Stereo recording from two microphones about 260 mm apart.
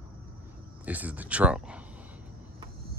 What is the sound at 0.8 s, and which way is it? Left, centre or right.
Speech, centre.